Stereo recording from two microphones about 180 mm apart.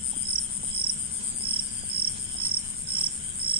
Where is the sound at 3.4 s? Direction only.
30° right (ahead or behind).